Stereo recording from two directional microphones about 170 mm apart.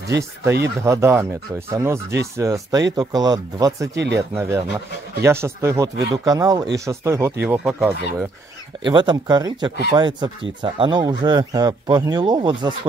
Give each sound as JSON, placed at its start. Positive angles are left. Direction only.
{"t": 0.2, "sound": "speech", "side_deg": -15}
{"t": 3.9, "sound": "speech", "side_deg": -85}
{"t": 4.2, "sound": "speech", "side_deg": -15}
{"t": 8.8, "sound": "speech", "side_deg": -25}